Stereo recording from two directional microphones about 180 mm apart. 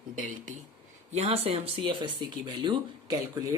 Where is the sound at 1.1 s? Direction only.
35° right (ahead or behind).